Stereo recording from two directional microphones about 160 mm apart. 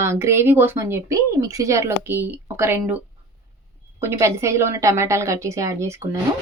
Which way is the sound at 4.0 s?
15° right (ahead or behind).